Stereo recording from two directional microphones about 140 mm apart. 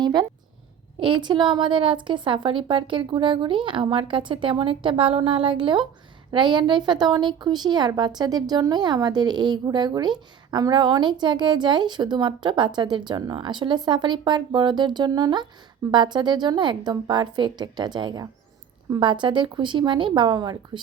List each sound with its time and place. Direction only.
0.0 s speech: 30° right (ahead or behind)